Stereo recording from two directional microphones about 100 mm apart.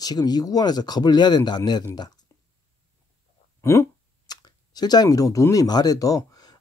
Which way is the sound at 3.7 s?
30° left (ahead or behind).